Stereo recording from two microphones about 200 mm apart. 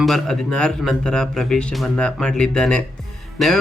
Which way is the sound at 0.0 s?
Centre (ahead or behind).